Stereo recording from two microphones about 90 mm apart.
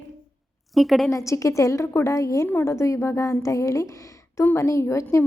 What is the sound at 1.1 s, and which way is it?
A woman's voice, 35° left (ahead or behind).